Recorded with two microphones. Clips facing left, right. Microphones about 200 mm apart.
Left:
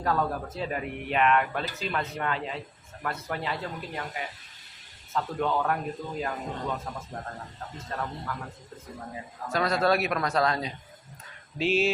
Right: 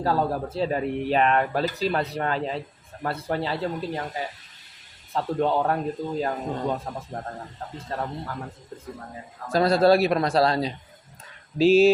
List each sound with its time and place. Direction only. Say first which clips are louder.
0.0 s a man's voice: right 4 dB; 30° right (ahead or behind)
9.5 s speech: right 7 dB; 30° right (ahead or behind)